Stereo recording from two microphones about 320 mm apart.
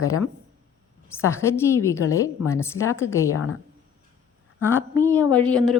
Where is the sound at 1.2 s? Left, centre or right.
Centre.